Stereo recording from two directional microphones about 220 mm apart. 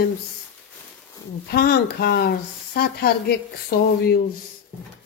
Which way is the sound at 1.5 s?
45° left (ahead or behind).